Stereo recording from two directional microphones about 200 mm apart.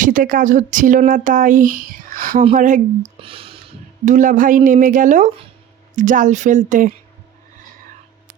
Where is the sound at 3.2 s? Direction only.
25° right (ahead or behind).